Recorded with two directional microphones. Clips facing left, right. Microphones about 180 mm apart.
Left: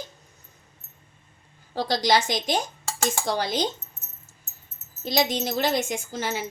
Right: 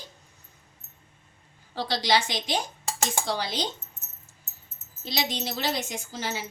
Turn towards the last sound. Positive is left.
turn(degrees=50)  # may be behind; listen again after turning